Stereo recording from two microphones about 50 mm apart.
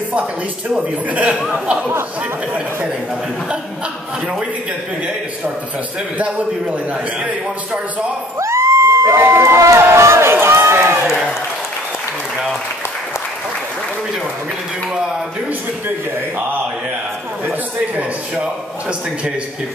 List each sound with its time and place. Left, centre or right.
0.7 s a man's voice: right
6.1 s a man's voice: right
8.4 s crowd: right
9.8 s run: right
11.1 s speech: centre
18.4 s a man's voice: right